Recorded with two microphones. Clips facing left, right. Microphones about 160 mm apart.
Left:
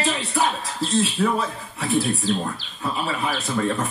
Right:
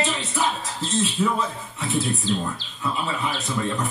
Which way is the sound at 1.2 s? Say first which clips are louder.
Even; 70° left (ahead or behind).